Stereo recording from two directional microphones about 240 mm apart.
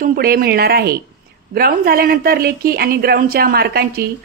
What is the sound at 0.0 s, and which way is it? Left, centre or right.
Speech, right.